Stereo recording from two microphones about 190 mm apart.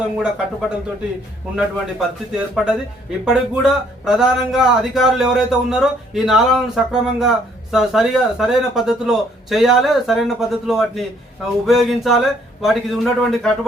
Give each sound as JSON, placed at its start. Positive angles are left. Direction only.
{"t": 0.0, "sound": "speech", "side_deg": -5}